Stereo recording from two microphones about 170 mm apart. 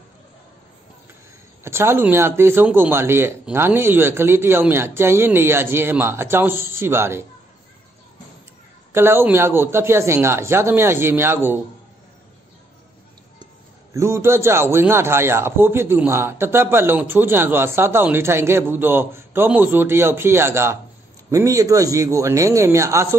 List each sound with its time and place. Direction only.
1.6 s a man's voice: 15° right (ahead or behind)
8.9 s a man's voice: 15° right (ahead or behind)
13.9 s a man's voice: 15° right (ahead or behind)